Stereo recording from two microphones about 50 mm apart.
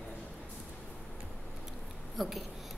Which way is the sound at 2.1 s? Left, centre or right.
Centre.